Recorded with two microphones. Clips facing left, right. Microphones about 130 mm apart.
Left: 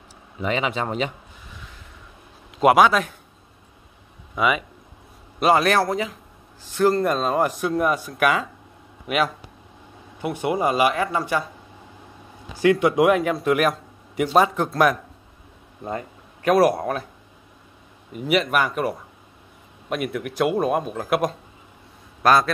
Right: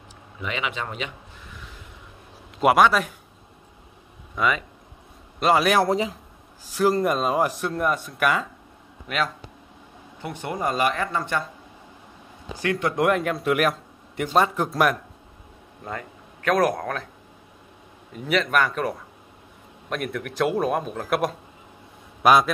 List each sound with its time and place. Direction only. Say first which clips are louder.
0.4 s speech: left 6 dB; 35° left (ahead or behind)
2.6 s a man's voice: left 2 dB; centre (ahead or behind)
4.4 s speech: left 2 dB; 10° left (ahead or behind)
5.4 s a man's voice: left 2 dB; centre (ahead or behind)
5.9 s speech: right 2 dB; 30° right (ahead or behind)
6.6 s a man's voice: left 2 dB; 10° right (ahead or behind); by 11.4 s 10° left (ahead or behind)
12.5 s a man's voice: left 7 dB; 15° left (ahead or behind); by 15.0 s centre (ahead or behind)
15.8 s a sound: left 4 dB; 25° left (ahead or behind)
16.5 s speech: left 4 dB; 10° left (ahead or behind)
18.1 s a man's voice: left 2 dB; 10° left (ahead or behind)
22.2 s a man's voice: even; 10° right (ahead or behind)